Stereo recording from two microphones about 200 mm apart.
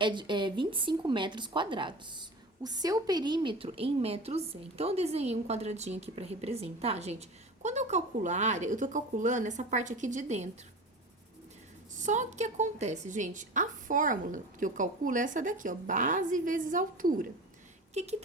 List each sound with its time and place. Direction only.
0.0 s a woman's voice: 25° right (ahead or behind)
11.9 s a woman's voice: 40° right (ahead or behind)